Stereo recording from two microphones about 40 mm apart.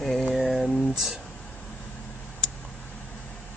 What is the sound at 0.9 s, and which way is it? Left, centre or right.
Speech, centre.